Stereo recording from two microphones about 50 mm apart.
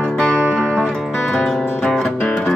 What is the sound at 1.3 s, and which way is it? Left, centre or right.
Music, centre.